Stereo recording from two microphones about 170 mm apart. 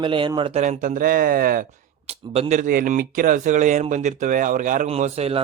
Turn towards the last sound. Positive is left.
turn(degrees=-40)  # may be behind; listen again after turning